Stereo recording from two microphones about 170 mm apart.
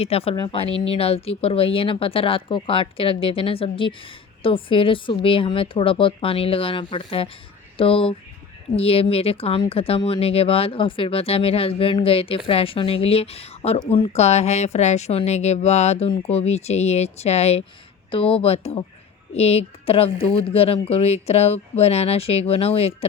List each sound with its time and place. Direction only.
0.0 s speech: 35° left (ahead or behind)